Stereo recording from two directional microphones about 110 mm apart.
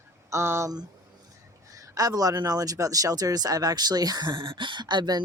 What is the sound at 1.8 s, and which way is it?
Speech, 35° right (ahead or behind).